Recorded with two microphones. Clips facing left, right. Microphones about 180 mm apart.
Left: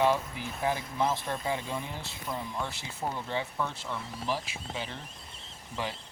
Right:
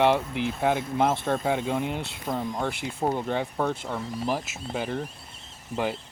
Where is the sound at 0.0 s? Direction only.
70° right (ahead or behind).